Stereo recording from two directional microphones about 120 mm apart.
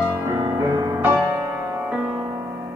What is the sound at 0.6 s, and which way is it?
Music, 30° right (ahead or behind).